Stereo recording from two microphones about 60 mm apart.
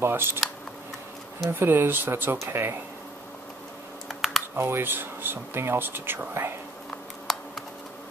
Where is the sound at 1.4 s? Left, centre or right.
Right.